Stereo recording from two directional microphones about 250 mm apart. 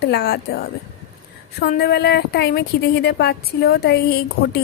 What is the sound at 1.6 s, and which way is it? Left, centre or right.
A woman's voice, left.